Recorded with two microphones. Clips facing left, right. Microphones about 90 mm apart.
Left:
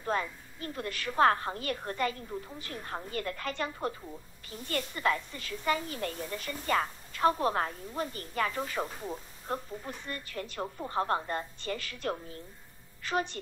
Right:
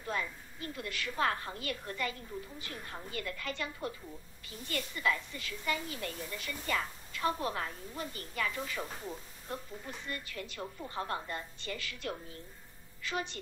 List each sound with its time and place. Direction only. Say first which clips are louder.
0.0 s a woman's voice: left 5 dB; 40° left (ahead or behind)